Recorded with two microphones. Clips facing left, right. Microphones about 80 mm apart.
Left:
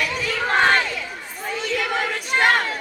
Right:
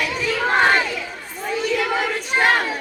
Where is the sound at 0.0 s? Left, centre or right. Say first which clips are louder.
Right 2 dB; centre.